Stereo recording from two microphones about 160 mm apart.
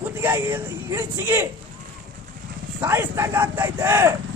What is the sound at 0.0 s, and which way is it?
Speech, 15° right (ahead or behind).